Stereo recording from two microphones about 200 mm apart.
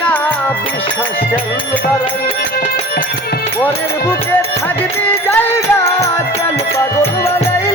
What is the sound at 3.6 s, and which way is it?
Speech, 10° left (ahead or behind).